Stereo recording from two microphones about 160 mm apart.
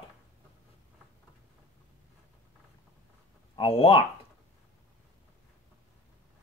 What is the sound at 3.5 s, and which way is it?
Speech, 35° left (ahead or behind).